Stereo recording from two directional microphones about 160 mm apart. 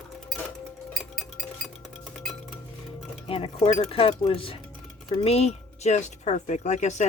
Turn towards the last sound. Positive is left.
turn(degrees=45)  # may be behind; listen again after turning